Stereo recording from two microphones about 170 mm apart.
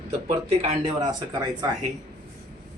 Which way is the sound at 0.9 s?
25° right (ahead or behind).